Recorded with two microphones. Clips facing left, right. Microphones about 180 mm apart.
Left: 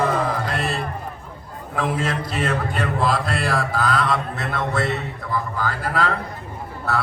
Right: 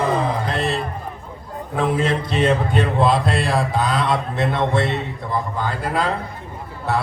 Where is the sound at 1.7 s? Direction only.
25° right (ahead or behind).